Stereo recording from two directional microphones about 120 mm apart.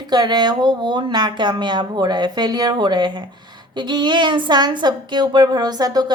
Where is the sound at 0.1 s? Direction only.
35° right (ahead or behind).